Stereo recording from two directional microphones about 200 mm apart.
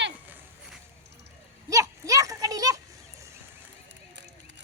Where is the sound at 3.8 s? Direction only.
60° right (ahead or behind).